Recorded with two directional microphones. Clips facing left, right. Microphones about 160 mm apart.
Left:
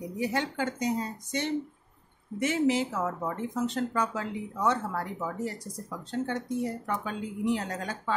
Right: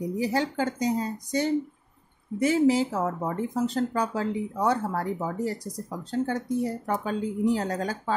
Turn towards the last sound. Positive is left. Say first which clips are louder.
# right 4 dB
turn(degrees=-35)  # may be behind; listen again after turning